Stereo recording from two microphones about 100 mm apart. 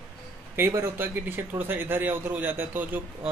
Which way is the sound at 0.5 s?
25° right (ahead or behind).